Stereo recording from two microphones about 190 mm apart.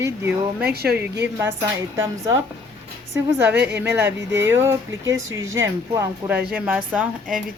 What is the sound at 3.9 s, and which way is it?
Speech, 10° right (ahead or behind).